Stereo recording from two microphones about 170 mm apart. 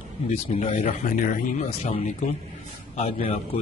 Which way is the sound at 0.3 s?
40° left (ahead or behind).